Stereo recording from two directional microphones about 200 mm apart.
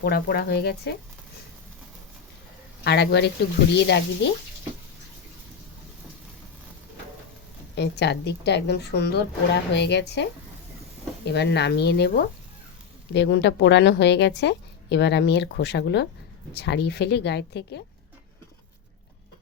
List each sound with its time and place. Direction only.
0.0 s speech: 50° left (ahead or behind)
2.8 s a woman's voice: 55° left (ahead or behind)
7.8 s a woman's voice: 55° left (ahead or behind)
11.3 s a woman's voice: 55° left (ahead or behind)